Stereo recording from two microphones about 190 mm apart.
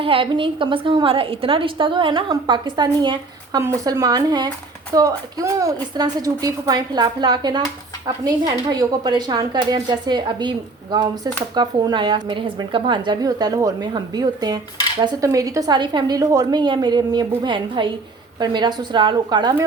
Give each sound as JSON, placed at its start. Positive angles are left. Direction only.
{"t": 0.0, "sound": "a woman's voice", "side_deg": -30}